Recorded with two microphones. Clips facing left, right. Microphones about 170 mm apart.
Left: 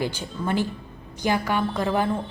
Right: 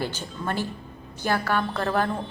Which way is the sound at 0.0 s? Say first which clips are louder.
Left 2 dB; 10° left (ahead or behind).